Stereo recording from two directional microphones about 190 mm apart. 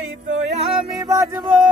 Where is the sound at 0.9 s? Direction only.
20° right (ahead or behind).